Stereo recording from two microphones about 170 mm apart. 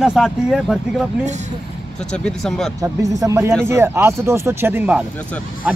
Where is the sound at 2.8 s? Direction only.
20° right (ahead or behind).